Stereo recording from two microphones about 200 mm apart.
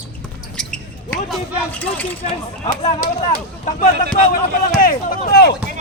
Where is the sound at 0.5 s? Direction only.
5° left (ahead or behind).